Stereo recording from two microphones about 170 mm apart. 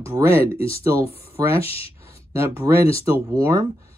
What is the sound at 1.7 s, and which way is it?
Speech, 35° left (ahead or behind).